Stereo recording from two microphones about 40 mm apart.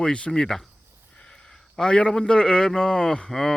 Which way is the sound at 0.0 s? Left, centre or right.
Left.